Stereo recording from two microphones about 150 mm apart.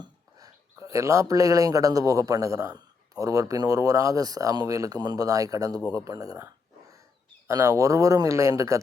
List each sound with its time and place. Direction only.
0.0 s speech: 25° right (ahead or behind)